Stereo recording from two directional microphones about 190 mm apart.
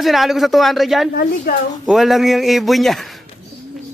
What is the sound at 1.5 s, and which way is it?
Speech, 55° left (ahead or behind).